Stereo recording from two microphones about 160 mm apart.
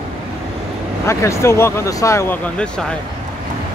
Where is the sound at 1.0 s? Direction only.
20° left (ahead or behind).